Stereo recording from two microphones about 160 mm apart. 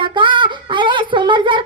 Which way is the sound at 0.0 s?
30° right (ahead or behind).